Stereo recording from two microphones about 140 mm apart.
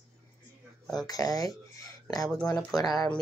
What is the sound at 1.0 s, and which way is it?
Speech, 25° left (ahead or behind).